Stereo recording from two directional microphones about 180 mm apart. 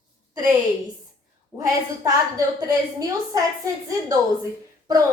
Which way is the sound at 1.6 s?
15° right (ahead or behind).